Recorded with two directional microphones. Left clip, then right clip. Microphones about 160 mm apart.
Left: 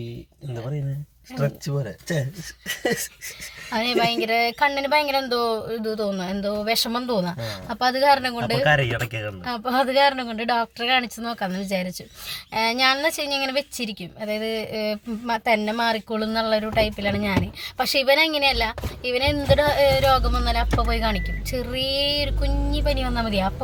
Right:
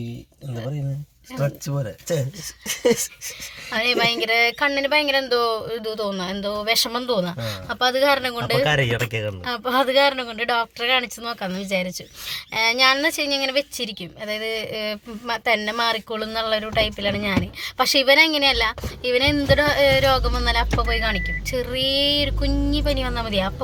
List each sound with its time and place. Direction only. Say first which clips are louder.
1.6 s speech: right 1 dB; 75° right (ahead or behind)
3.7 s speech: right 2 dB; 5° left (ahead or behind)
8.6 s speech: left 3 dB; 70° right (ahead or behind)
9.5 s speech: right 2 dB; 5° left (ahead or behind)